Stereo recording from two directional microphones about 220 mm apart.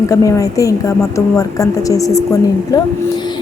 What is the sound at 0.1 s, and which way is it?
A woman's voice, 15° left (ahead or behind).